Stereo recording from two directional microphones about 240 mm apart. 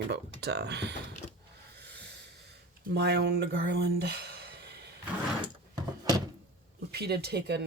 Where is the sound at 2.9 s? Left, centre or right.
Right.